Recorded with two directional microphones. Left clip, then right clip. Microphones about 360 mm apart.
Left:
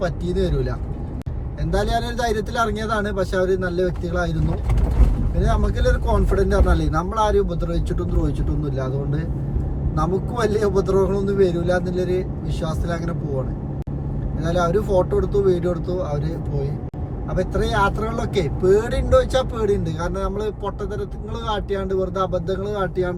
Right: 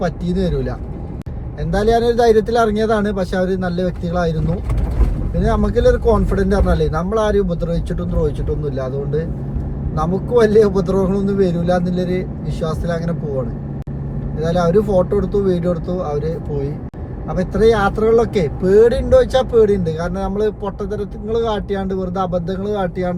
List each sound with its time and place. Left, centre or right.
0.0 s speech: centre
1.7 s speech: centre
5.4 s speech: centre
9.9 s speech: centre
14.3 s speech: centre
17.3 s speech: centre